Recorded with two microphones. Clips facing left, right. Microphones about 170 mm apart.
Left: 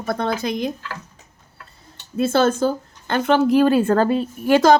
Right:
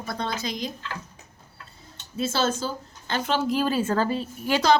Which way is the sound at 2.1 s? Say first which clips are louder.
Left 8 dB; 55° left (ahead or behind).